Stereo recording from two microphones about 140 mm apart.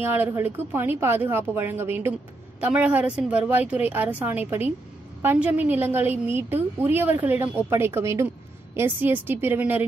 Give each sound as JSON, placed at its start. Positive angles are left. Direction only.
{"t": 0.0, "sound": "a woman's voice", "side_deg": -15}